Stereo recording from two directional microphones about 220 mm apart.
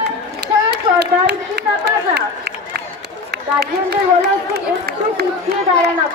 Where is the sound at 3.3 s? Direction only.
45° right (ahead or behind).